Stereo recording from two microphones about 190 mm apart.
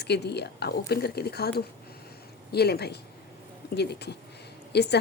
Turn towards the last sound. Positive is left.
turn(degrees=60)  # may be behind; listen again after turning